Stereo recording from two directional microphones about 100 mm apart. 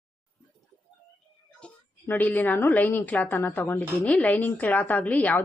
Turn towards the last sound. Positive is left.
turn(degrees=15)  # may be behind; listen again after turning